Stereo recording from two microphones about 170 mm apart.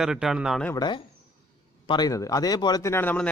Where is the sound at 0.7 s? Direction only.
25° left (ahead or behind).